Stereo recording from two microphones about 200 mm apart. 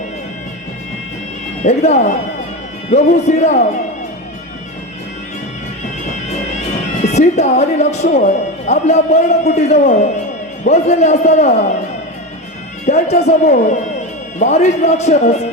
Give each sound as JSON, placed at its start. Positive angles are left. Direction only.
{"t": 1.6, "sound": "speech", "side_deg": 35}
{"t": 7.0, "sound": "speech", "side_deg": 35}
{"t": 12.8, "sound": "speech", "side_deg": 35}